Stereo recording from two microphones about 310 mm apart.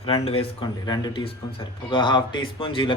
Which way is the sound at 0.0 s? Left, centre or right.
Centre.